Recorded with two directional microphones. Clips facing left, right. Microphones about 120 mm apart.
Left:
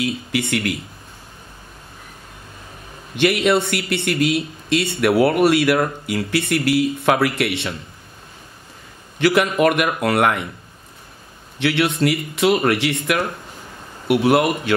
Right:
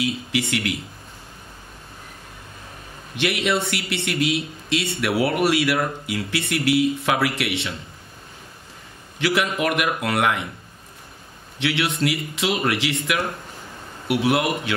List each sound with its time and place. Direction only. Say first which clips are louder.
0.3 s a man's voice: left 3 dB; 50° left (ahead or behind)
3.2 s a man's voice: left 6 dB; 55° left (ahead or behind)
9.2 s a man's voice: left 6 dB; 55° left (ahead or behind)
11.6 s a man's voice: left 4 dB; 55° left (ahead or behind)